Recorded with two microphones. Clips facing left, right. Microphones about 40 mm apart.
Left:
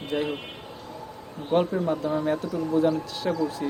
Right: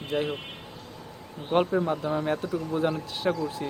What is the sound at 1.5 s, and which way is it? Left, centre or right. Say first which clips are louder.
Speech: left 1 dB; centre.